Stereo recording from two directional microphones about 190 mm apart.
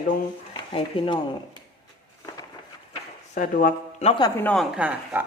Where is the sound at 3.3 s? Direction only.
40° left (ahead or behind).